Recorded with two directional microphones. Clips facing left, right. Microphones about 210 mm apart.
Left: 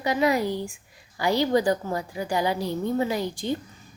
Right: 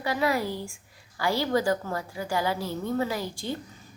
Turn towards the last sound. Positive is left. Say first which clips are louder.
# left 4 dB
turn(degrees=20)  # may be behind; listen again after turning